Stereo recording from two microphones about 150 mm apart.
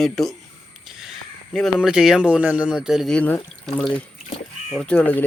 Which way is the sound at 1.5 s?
Centre (ahead or behind).